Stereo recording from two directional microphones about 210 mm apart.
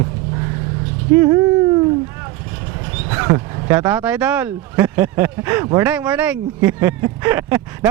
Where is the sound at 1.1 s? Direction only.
15° right (ahead or behind).